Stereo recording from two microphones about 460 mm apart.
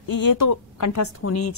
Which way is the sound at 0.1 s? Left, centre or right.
Left.